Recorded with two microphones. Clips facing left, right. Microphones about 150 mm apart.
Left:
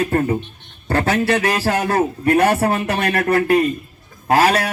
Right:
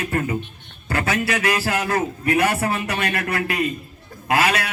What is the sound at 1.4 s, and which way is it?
A man's voice, 35° left (ahead or behind).